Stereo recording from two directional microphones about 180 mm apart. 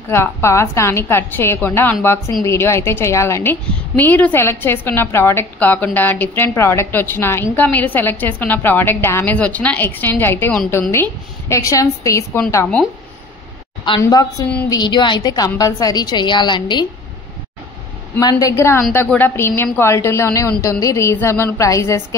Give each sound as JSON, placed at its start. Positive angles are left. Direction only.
{"t": 0.1, "sound": "a woman's voice", "side_deg": 15}
{"t": 14.7, "sound": "a woman's voice", "side_deg": 25}
{"t": 18.2, "sound": "a woman's voice", "side_deg": 15}